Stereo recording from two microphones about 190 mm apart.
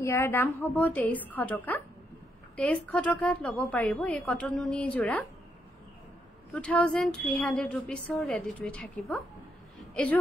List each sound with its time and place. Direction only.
0.0 s a woman's voice: 15° left (ahead or behind)
6.5 s a woman's voice: 5° left (ahead or behind)